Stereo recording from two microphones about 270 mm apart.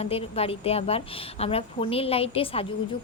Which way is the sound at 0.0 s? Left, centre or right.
Left.